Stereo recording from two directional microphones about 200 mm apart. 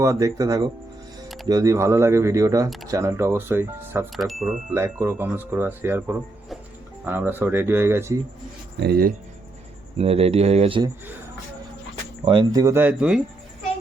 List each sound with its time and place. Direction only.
0.0 s speech: 15° right (ahead or behind)
4.1 s speech: centre (ahead or behind)
4.7 s speech: 15° right (ahead or behind)
8.8 s speech: 50° right (ahead or behind)
10.0 s speech: 30° right (ahead or behind)
12.2 s speech: 25° right (ahead or behind); by 13.2 s 5° right (ahead or behind)